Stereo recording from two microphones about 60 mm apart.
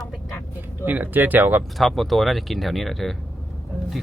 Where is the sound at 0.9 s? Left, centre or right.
Right.